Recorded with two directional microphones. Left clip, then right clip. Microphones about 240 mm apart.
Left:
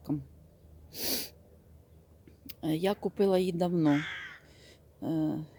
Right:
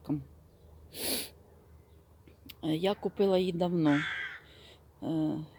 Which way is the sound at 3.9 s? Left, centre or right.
Right.